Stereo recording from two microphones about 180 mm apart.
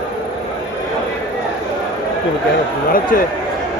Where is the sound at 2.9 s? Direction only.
50° left (ahead or behind).